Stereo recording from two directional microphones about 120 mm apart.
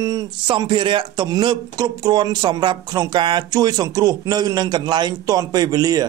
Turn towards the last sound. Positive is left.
turn(degrees=-30)  # may be behind; listen again after turning